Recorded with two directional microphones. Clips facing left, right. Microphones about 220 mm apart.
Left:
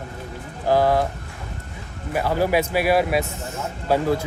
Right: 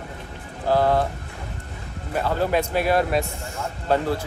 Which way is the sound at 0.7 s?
10° left (ahead or behind).